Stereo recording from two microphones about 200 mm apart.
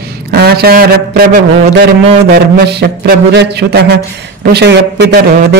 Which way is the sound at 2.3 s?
50° right (ahead or behind).